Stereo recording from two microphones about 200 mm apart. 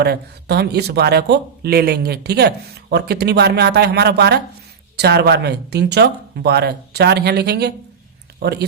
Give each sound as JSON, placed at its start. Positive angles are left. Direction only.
{"t": 0.0, "sound": "speech", "side_deg": -55}